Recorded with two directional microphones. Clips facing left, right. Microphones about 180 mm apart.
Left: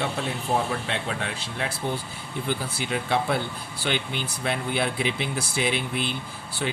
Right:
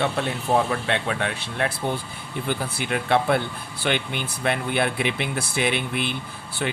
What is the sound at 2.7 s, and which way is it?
Speech, 60° right (ahead or behind).